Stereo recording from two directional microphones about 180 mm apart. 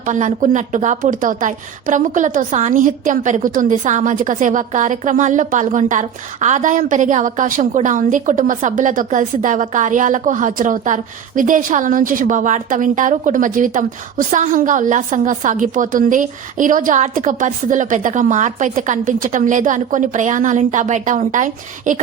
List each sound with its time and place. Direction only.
0.0 s a woman's voice: 45° right (ahead or behind)